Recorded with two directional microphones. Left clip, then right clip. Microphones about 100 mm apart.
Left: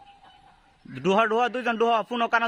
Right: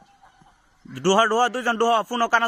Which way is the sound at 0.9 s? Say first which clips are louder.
Right 3 dB; 55° right (ahead or behind).